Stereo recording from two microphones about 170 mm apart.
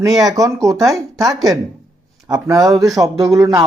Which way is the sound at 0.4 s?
20° right (ahead or behind).